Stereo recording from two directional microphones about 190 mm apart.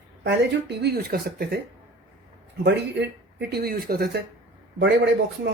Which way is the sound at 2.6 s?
65° right (ahead or behind).